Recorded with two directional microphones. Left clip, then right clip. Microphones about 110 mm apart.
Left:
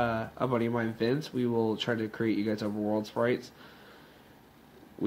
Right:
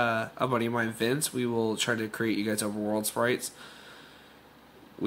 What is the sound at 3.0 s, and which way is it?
Speech, 5° right (ahead or behind).